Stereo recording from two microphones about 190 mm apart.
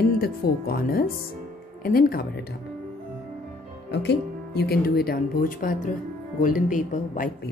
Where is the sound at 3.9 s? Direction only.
60° left (ahead or behind); by 7.3 s 45° left (ahead or behind).